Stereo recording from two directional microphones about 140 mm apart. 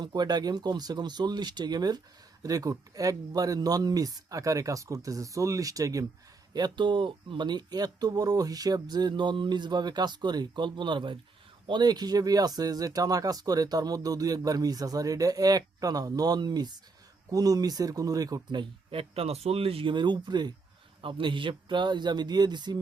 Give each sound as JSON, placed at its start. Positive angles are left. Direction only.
{"t": 0.0, "sound": "speech", "side_deg": -30}